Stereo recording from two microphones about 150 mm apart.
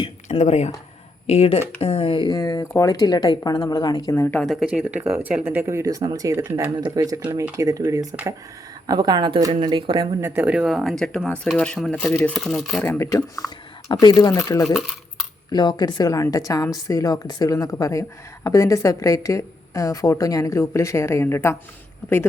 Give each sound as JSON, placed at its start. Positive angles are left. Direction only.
{"t": 0.0, "sound": "a woman's voice", "side_deg": 45}
{"t": 4.1, "sound": "a woman's voice", "side_deg": 15}
{"t": 4.6, "sound": "speech", "side_deg": -10}
{"t": 6.7, "sound": "speech", "side_deg": -30}
{"t": 7.2, "sound": "speech", "side_deg": -10}
{"t": 8.1, "sound": "speech", "side_deg": -10}
{"t": 8.9, "sound": "speech", "side_deg": -30}
{"t": 10.2, "sound": "speech", "side_deg": -15}
{"t": 12.8, "sound": "a woman's voice", "side_deg": 15}
{"t": 14.8, "sound": "coin", "side_deg": 0}
{"t": 15.5, "sound": "a woman's voice", "side_deg": 30}